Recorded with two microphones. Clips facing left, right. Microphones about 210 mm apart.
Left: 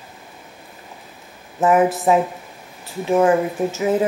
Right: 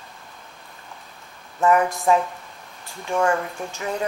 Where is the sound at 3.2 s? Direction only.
15° left (ahead or behind).